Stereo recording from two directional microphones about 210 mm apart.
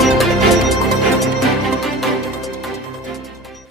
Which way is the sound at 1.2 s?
Centre (ahead or behind).